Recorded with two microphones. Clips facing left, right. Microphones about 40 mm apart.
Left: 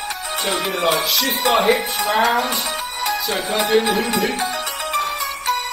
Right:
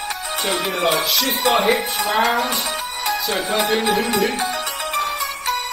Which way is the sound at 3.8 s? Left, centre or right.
Right.